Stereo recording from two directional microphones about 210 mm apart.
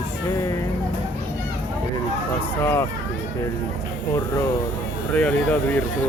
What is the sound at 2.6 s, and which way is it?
Speech, 10° left (ahead or behind).